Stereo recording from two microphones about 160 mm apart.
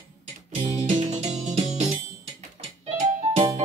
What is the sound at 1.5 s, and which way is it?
Music, 45° right (ahead or behind).